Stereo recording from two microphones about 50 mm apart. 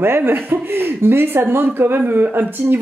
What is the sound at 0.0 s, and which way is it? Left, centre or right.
Speech, right.